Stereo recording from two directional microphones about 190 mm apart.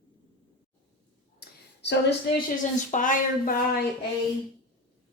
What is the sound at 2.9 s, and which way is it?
Speech, 45° left (ahead or behind).